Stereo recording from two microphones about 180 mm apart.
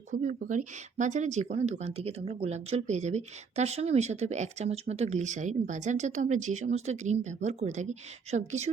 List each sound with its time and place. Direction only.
0.1 s speech: 45° right (ahead or behind)